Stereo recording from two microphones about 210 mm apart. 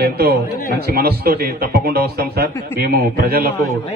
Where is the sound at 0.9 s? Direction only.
45° right (ahead or behind).